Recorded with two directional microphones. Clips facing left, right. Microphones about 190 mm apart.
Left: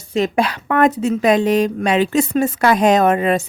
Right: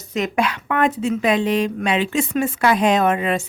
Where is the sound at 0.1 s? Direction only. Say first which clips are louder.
Left 3 dB; 30° left (ahead or behind).